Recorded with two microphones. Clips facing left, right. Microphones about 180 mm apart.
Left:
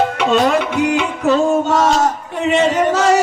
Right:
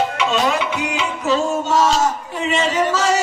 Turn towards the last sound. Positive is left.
turn(degrees=55)  # may be behind; listen again after turning